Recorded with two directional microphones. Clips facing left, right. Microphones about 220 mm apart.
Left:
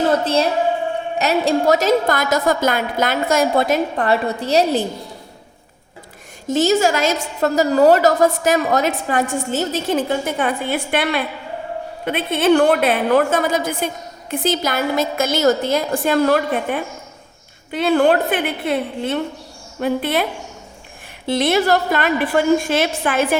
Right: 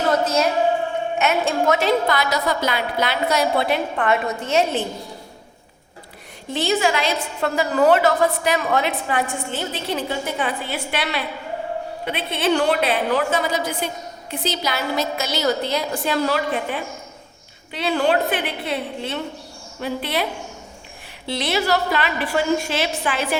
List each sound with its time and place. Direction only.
0.1 s a sound: 30° left (ahead or behind)
1.2 s a woman's voice: 35° left (ahead or behind)
6.5 s a woman's voice: 45° left (ahead or behind)
21.2 s a woman's voice: 50° left (ahead or behind)